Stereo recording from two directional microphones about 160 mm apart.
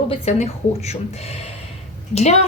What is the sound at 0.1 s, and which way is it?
Speech, 45° left (ahead or behind).